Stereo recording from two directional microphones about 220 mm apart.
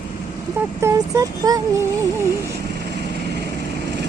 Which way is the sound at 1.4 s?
15° right (ahead or behind).